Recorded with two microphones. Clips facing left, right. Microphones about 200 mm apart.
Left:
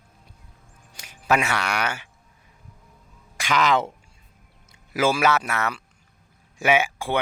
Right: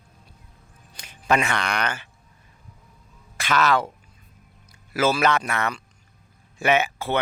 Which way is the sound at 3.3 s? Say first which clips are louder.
Even; 15° left (ahead or behind).